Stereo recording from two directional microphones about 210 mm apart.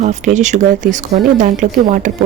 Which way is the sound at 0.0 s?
35° right (ahead or behind).